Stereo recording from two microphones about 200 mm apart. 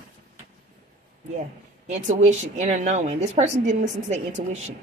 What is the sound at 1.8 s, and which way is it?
Speech, 35° right (ahead or behind).